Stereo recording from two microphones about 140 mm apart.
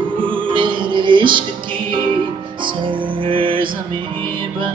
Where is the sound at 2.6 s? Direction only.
35° right (ahead or behind).